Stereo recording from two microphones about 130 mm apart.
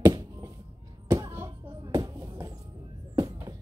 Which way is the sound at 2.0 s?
30° right (ahead or behind).